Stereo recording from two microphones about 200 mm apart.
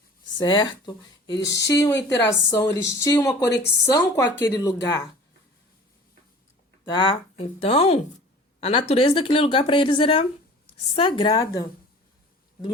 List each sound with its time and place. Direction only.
0.3 s speech: 20° left (ahead or behind)
1.4 s speech: 60° left (ahead or behind)
1.6 s speech: 15° left (ahead or behind)
6.9 s speech: 25° left (ahead or behind)